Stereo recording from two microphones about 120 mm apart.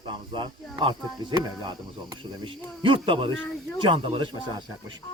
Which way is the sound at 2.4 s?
45° right (ahead or behind).